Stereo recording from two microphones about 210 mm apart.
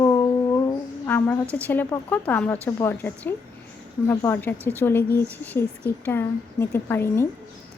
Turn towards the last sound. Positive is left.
turn(degrees=10)  # may be behind; listen again after turning